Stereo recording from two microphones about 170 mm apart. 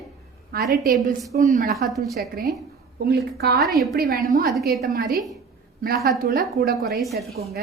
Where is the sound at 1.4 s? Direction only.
45° right (ahead or behind).